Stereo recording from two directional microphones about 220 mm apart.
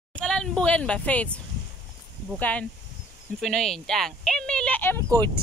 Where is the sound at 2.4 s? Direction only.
5° left (ahead or behind).